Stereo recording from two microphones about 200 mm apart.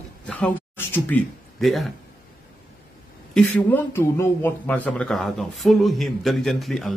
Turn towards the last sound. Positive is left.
turn(degrees=0)  # may be behind; listen again after turning